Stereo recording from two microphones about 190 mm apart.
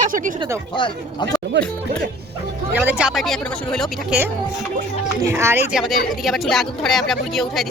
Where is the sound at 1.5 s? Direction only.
65° right (ahead or behind).